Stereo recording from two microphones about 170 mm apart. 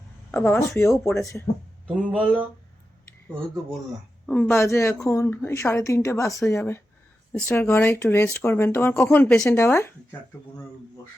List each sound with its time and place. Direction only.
0.3 s a woman's voice: 10° left (ahead or behind)
2.1 s speech: 10° right (ahead or behind)
4.3 s a woman's voice: 10° left (ahead or behind)